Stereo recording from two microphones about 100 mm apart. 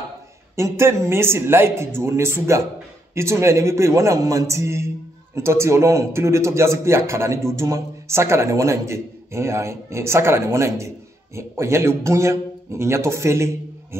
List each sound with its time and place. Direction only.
0.6 s a man's voice: 25° right (ahead or behind)